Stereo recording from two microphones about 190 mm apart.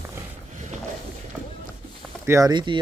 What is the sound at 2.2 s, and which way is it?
Speech, 15° right (ahead or behind).